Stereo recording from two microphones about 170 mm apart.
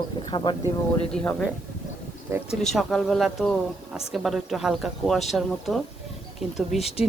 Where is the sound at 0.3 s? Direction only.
25° left (ahead or behind).